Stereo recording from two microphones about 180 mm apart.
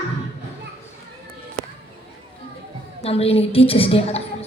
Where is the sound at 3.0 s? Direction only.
35° left (ahead or behind).